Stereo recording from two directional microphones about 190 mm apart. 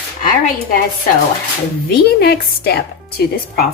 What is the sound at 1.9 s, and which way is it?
Speech, 55° left (ahead or behind).